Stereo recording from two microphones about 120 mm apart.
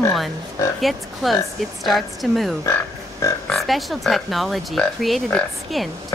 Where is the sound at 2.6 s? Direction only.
25° left (ahead or behind).